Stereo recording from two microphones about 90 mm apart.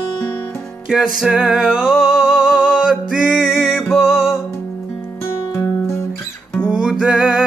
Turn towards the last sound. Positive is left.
turn(degrees=-5)  # may be behind; listen again after turning